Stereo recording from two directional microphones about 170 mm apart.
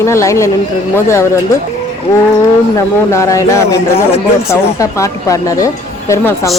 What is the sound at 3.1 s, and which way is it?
Speech, 15° left (ahead or behind).